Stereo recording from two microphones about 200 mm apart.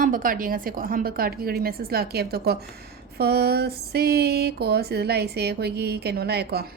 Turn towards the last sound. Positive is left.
turn(degrees=-55)  # may be behind; listen again after turning